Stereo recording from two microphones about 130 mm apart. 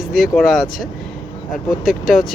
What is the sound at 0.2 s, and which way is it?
Speech, centre (ahead or behind).